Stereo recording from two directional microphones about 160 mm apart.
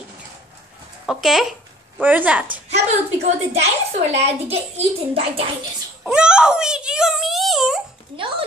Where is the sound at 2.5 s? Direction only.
40° right (ahead or behind).